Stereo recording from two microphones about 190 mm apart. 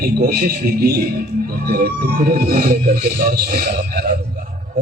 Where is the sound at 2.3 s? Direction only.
50° right (ahead or behind).